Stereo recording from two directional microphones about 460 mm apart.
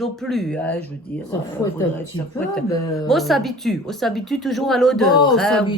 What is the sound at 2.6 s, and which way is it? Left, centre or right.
A woman's voice, centre.